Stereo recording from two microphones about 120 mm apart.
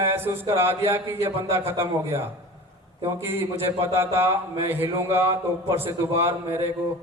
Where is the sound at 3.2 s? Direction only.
20° right (ahead or behind).